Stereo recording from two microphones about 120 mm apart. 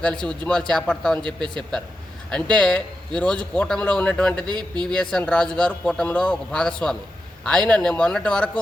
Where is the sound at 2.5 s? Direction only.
10° left (ahead or behind).